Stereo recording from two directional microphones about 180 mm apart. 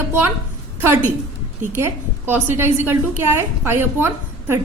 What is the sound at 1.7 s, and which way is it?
A woman's voice, 10° right (ahead or behind).